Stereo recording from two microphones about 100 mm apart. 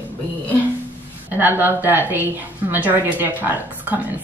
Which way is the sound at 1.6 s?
20° right (ahead or behind).